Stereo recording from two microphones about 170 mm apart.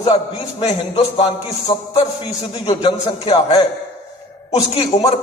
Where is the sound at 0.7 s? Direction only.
30° left (ahead or behind).